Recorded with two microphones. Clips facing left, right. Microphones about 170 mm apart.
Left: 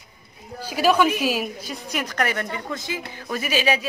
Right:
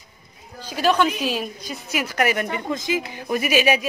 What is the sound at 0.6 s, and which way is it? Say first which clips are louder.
A woman's voice: left 1 dB; 10° left (ahead or behind).